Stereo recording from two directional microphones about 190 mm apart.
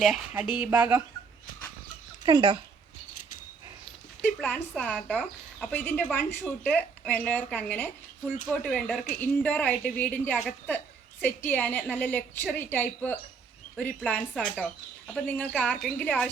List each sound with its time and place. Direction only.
0.0 s speech: centre (ahead or behind)
2.2 s speech: 25° right (ahead or behind)
4.2 s speech: 10° left (ahead or behind)